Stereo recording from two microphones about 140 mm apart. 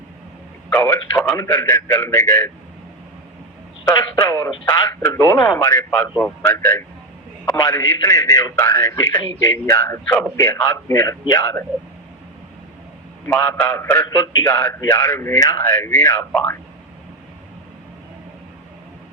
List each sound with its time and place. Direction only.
0.7 s a man's voice: 15° left (ahead or behind)
4.1 s a man's voice: 25° left (ahead or behind)
13.2 s a man's voice: 15° left (ahead or behind)